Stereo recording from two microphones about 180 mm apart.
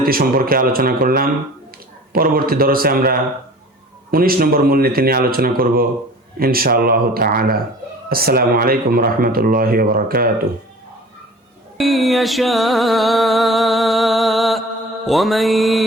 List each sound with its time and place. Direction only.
0.0 s a man's voice: 55° right (ahead or behind)
11.8 s music: centre (ahead or behind)